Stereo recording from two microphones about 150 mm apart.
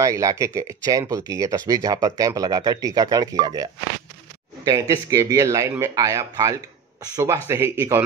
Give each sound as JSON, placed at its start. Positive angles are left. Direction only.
{"t": 0.0, "sound": "speech", "side_deg": -20}